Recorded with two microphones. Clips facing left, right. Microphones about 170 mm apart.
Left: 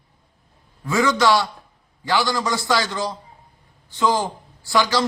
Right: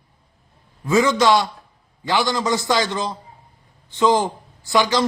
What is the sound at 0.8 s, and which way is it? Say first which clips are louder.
A man's voice: right 2 dB; 20° right (ahead or behind).